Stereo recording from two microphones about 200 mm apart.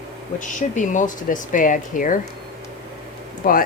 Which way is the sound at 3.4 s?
45° left (ahead or behind).